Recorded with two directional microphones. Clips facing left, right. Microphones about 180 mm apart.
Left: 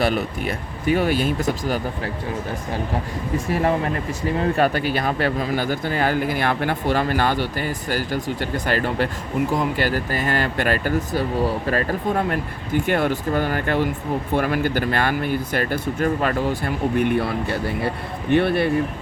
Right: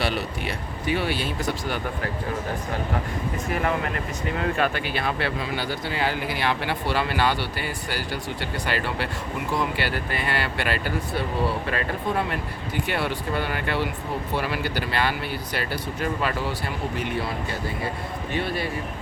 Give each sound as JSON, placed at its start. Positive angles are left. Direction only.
{"t": 0.0, "sound": "speech", "side_deg": 45}
{"t": 3.5, "sound": "speech", "side_deg": 35}